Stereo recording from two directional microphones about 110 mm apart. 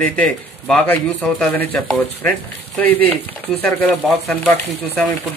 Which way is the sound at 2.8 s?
15° left (ahead or behind).